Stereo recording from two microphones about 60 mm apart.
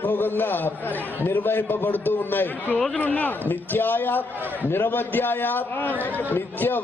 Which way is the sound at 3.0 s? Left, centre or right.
Left.